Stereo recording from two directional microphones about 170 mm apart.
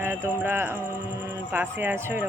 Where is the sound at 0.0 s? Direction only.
10° right (ahead or behind).